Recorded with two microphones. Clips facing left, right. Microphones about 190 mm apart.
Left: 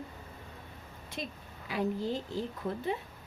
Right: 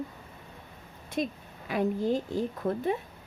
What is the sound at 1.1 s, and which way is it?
A woman's voice, 50° right (ahead or behind).